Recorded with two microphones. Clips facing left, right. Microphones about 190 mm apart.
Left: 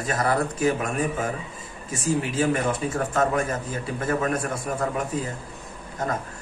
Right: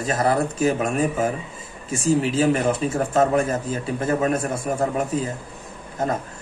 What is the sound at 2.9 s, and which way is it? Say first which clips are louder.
A man's voice: right 5 dB; 30° right (ahead or behind).